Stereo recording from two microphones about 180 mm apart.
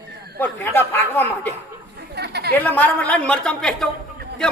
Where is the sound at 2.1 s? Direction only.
65° right (ahead or behind).